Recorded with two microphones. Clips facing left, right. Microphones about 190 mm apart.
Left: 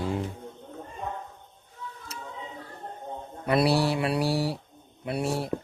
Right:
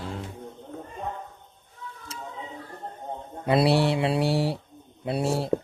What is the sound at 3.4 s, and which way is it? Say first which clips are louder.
Speech: right 2 dB; 25° right (ahead or behind).